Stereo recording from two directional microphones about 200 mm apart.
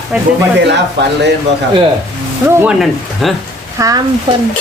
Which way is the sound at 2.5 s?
10° right (ahead or behind).